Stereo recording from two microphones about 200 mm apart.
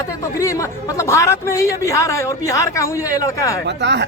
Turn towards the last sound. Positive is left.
turn(degrees=-60)  # may be behind; listen again after turning